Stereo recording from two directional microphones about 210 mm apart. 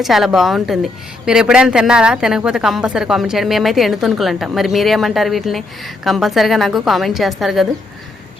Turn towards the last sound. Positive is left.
turn(degrees=0)  # may be behind; listen again after turning